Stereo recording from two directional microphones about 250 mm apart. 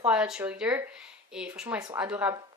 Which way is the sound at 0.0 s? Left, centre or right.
Centre.